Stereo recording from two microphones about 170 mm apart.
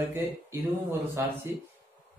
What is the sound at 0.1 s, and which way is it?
Speech, 15° right (ahead or behind).